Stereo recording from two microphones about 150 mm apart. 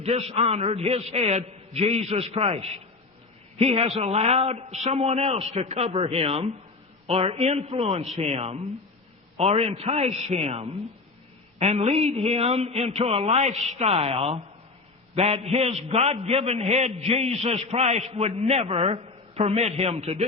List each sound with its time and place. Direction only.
0.0 s a man's voice: 45° right (ahead or behind)